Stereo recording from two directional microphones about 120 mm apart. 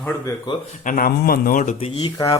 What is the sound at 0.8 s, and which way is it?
Speech, 90° left.